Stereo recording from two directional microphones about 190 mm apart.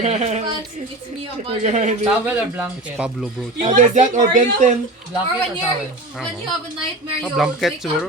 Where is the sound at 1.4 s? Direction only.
35° right (ahead or behind).